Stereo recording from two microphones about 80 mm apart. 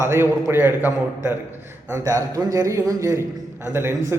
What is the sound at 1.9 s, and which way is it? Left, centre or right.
A man's voice, right.